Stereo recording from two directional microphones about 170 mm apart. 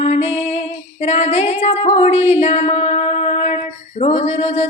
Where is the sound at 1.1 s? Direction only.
40° left (ahead or behind).